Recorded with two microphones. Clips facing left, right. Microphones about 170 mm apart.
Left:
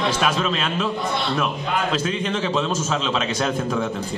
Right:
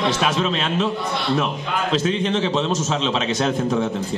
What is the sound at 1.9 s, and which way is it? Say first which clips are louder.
A man's voice: right 3 dB; 25° right (ahead or behind).